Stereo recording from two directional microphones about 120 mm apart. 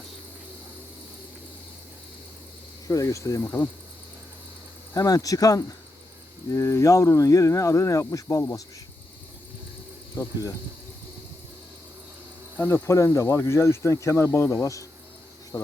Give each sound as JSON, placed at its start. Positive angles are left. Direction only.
{"t": 2.8, "sound": "speech", "side_deg": 25}
{"t": 4.9, "sound": "speech", "side_deg": 30}
{"t": 12.5, "sound": "speech", "side_deg": 20}
{"t": 15.5, "sound": "speech", "side_deg": 15}